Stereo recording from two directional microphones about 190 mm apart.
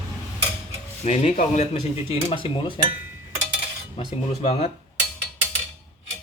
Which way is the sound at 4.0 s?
30° left (ahead or behind).